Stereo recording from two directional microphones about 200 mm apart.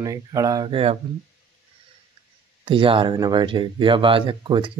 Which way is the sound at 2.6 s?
25° right (ahead or behind).